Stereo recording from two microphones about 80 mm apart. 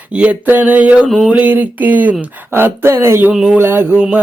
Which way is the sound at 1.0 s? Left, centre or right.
Centre.